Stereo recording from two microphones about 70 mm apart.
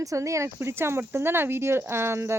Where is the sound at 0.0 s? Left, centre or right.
Right.